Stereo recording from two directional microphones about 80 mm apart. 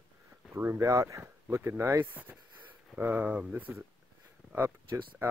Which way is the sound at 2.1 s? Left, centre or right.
Centre.